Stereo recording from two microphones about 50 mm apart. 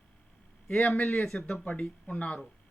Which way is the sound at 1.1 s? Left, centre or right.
Centre.